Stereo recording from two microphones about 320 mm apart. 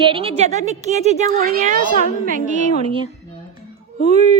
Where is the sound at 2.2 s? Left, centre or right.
Right.